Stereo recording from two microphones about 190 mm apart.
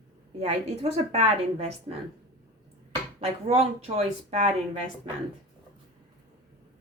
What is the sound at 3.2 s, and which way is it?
Speech, 30° right (ahead or behind).